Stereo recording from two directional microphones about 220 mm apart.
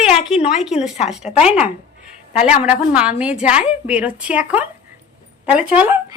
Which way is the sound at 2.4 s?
5° right (ahead or behind).